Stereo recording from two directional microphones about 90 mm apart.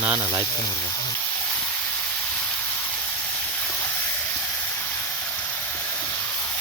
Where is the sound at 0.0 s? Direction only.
25° right (ahead or behind).